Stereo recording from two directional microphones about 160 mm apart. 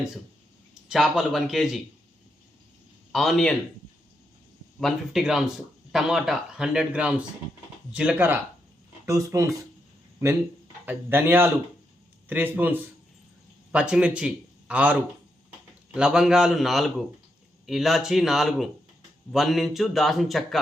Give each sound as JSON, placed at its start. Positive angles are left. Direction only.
{"t": 0.9, "sound": "a man's voice", "side_deg": -5}
{"t": 3.1, "sound": "a man's voice", "side_deg": 0}
{"t": 4.8, "sound": "a man's voice", "side_deg": 0}
{"t": 10.8, "sound": "speech", "side_deg": -15}
{"t": 16.0, "sound": "a man's voice", "side_deg": -5}